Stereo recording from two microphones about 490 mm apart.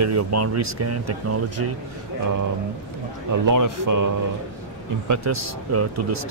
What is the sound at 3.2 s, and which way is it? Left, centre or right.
Speech, right.